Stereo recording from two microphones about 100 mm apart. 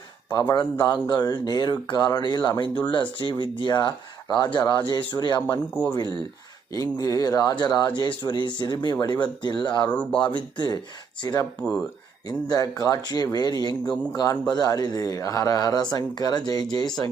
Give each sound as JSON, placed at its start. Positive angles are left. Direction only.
{"t": 0.5, "sound": "speech", "side_deg": 45}
{"t": 9.9, "sound": "speech", "side_deg": 10}
{"t": 10.2, "sound": "speech", "side_deg": 50}
{"t": 11.2, "sound": "speech", "side_deg": 40}
{"t": 13.9, "sound": "speech", "side_deg": 15}
{"t": 14.5, "sound": "speech", "side_deg": 40}